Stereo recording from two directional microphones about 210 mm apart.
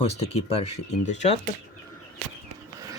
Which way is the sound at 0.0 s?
30° left (ahead or behind).